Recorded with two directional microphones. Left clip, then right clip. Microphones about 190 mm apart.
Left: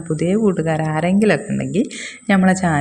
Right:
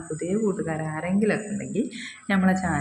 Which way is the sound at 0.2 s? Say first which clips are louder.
Left 8 dB; 40° left (ahead or behind).